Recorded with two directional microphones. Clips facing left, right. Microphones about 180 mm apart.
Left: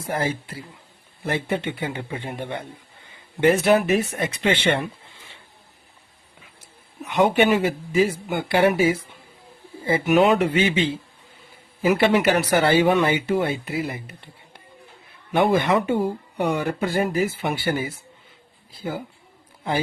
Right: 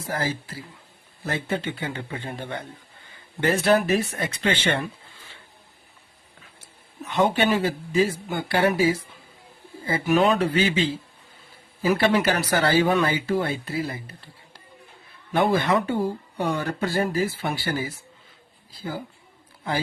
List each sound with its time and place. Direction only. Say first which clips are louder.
0.1 s speech: left 3 dB; 25° left (ahead or behind)
7.0 s speech: left 3 dB; 15° left (ahead or behind)
11.8 s speech: left 2 dB; 20° left (ahead or behind)
15.3 s speech: left 2 dB; 20° left (ahead or behind)